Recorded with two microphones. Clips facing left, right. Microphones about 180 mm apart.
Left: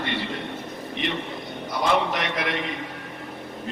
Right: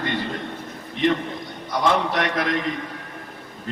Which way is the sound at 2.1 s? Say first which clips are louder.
Right 4 dB; 45° right (ahead or behind).